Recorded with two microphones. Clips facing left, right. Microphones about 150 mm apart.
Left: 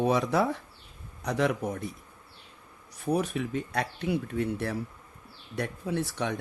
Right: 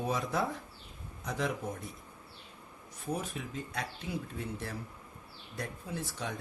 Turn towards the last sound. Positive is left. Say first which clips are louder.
# left 8 dB
turn(degrees=70)  # may be behind; listen again after turning